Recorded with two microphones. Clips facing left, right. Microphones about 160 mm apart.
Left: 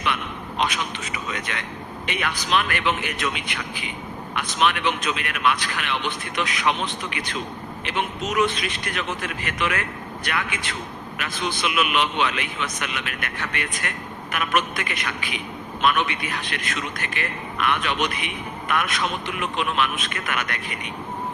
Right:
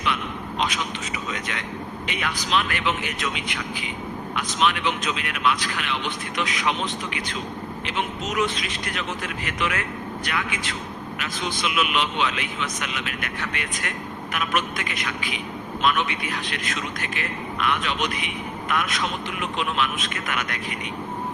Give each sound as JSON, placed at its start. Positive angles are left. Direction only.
{"t": 1.3, "sound": "speech", "side_deg": 60}